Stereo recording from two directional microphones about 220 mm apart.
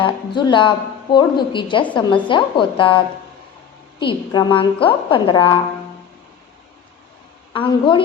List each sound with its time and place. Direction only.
0.0 s a woman's voice: 20° left (ahead or behind)
4.0 s a woman's voice: 20° left (ahead or behind)
7.5 s a woman's voice: 20° left (ahead or behind)